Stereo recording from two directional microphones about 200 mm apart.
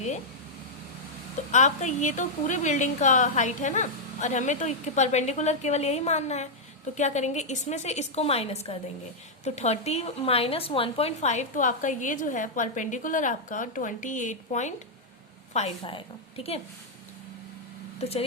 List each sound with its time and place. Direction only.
1.5 s speech: 35° left (ahead or behind)